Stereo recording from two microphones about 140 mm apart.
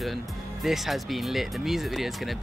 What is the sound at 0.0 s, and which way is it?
Speech, centre (ahead or behind).